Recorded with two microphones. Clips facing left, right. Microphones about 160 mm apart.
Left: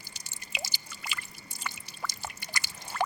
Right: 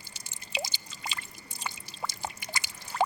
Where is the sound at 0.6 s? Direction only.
25° right (ahead or behind).